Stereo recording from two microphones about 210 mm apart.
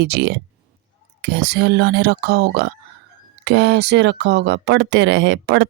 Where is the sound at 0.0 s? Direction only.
55° right (ahead or behind).